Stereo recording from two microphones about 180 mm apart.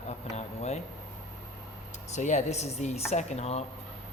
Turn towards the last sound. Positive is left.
turn(degrees=35)  # may be behind; listen again after turning